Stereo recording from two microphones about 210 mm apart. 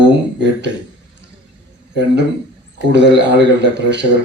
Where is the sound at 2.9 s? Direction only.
55° right (ahead or behind).